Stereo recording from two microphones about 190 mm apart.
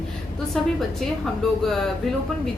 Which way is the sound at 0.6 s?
Centre (ahead or behind).